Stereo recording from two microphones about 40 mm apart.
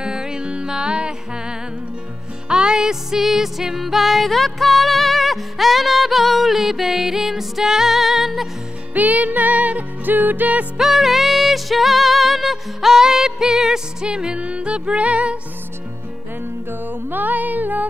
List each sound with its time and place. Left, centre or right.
0.0 s music: centre
8.9 s music: right
10.8 s music: centre; by 15.3 s right
16.8 s music: right